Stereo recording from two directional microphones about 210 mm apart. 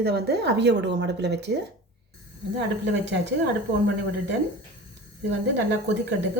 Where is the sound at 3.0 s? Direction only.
55° right (ahead or behind).